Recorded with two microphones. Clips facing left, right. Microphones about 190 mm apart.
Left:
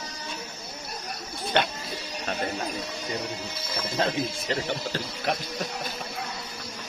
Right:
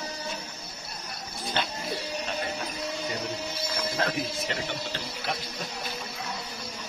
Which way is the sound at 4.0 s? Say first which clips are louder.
Left 4 dB; 35° left (ahead or behind).